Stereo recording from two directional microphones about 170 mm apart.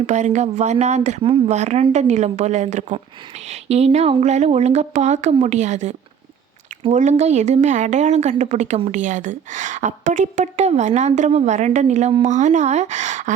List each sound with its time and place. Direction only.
0.0 s a woman's voice: 40° right (ahead or behind)